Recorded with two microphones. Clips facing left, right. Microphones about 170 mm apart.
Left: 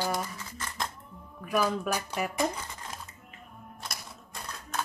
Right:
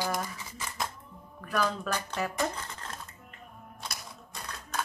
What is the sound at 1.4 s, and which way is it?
Speech, 10° left (ahead or behind).